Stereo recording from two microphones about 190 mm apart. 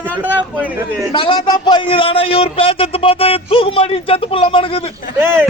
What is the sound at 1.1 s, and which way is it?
A man's voice, 25° left (ahead or behind).